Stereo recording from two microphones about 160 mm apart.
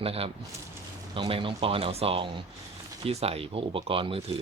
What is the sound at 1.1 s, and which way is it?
Speech, 35° right (ahead or behind).